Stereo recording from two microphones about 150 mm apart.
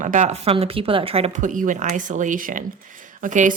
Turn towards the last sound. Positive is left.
turn(degrees=-60)  # may be behind; listen again after turning